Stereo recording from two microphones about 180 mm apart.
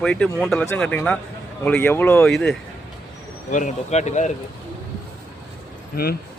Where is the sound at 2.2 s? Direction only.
Centre (ahead or behind).